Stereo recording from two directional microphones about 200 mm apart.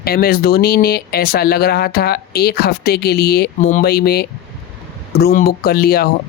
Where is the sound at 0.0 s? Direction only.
45° left (ahead or behind).